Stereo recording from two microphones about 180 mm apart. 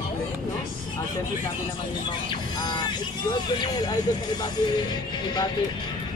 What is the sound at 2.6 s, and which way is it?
Speech, 25° left (ahead or behind).